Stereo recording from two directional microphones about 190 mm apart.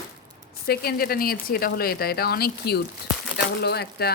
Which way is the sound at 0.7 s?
50° left (ahead or behind).